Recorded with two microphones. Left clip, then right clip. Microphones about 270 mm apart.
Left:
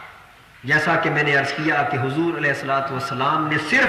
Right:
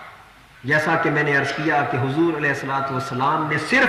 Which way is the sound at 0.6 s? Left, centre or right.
Centre.